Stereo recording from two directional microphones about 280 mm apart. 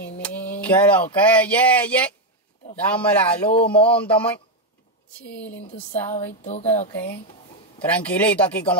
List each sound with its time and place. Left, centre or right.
0.2 s speech: centre
6.4 s a sound: left
7.8 s speech: centre